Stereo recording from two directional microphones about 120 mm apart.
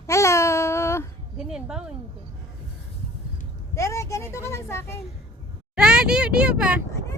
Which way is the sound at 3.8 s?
25° left (ahead or behind).